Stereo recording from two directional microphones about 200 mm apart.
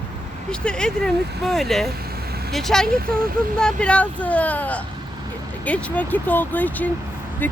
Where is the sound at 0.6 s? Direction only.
5° left (ahead or behind).